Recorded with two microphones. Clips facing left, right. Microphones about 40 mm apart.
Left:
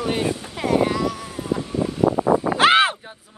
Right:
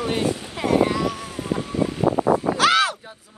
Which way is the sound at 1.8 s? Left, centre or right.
Right.